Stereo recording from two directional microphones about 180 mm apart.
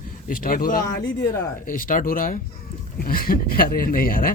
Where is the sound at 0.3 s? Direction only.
50° left (ahead or behind).